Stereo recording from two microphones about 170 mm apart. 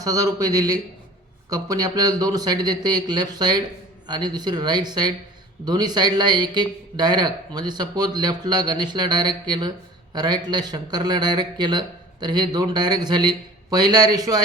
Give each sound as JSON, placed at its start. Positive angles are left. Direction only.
{"t": 0.0, "sound": "a man's voice", "side_deg": -20}